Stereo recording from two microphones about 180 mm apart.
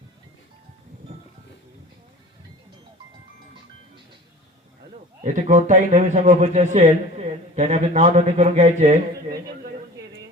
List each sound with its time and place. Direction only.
5.2 s a man's voice: 45° right (ahead or behind)